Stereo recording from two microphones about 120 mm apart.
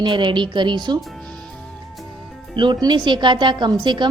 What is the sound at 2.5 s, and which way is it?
Speech, 40° right (ahead or behind).